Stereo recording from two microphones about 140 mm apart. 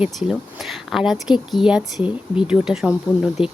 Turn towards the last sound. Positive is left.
turn(degrees=-5)  # may be behind; listen again after turning